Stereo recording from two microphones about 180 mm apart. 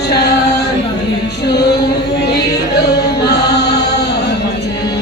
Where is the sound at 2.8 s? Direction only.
65° left (ahead or behind).